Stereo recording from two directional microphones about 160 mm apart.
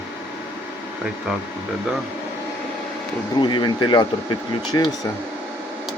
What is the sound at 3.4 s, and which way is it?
Speech, 30° left (ahead or behind).